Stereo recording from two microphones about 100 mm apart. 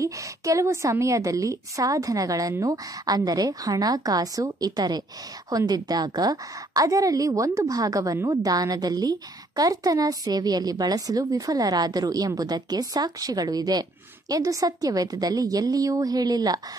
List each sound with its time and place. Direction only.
0.0 s a woman's voice: 30° right (ahead or behind)